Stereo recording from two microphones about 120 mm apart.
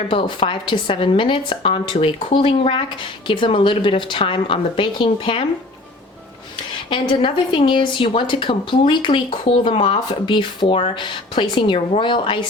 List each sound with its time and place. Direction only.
0.1 s a woman's voice: 45° left (ahead or behind)
6.9 s a woman's voice: 40° left (ahead or behind)